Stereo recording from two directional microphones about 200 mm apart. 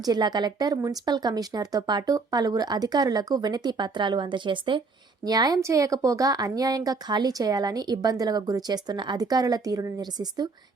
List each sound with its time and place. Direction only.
0.0 s speech: 20° right (ahead or behind)